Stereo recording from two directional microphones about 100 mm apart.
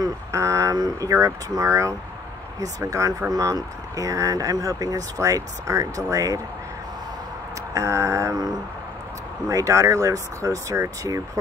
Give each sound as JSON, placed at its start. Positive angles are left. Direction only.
{"t": 0.0, "sound": "speech", "side_deg": -30}
{"t": 7.7, "sound": "speech", "side_deg": -35}